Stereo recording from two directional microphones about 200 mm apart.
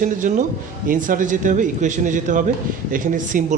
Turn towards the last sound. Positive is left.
turn(degrees=-40)  # may be behind; listen again after turning